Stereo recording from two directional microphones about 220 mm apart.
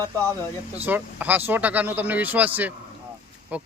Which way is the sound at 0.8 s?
10° right (ahead or behind).